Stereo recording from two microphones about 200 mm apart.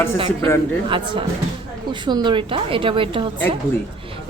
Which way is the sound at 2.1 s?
20° right (ahead or behind).